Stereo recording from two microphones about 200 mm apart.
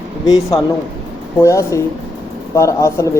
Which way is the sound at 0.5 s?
25° left (ahead or behind).